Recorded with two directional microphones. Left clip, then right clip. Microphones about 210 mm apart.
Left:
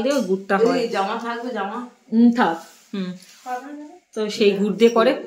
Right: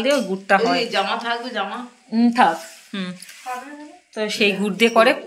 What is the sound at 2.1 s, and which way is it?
Speech, 5° left (ahead or behind).